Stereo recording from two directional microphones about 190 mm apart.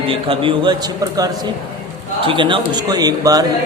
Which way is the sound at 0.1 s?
25° right (ahead or behind).